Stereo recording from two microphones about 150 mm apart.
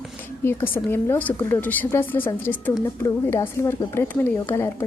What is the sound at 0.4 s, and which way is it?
A woman's voice, 15° left (ahead or behind).